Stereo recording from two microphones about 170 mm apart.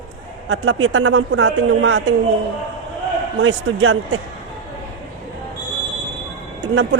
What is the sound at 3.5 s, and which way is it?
Speech, 90° right.